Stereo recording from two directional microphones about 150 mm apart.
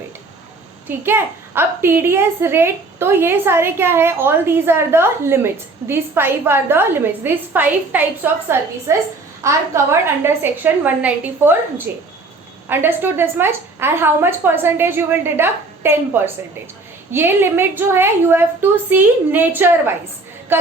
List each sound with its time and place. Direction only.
0.9 s a woman's voice: 15° right (ahead or behind)
12.6 s a woman's voice: 15° right (ahead or behind)
20.5 s music: 15° right (ahead or behind)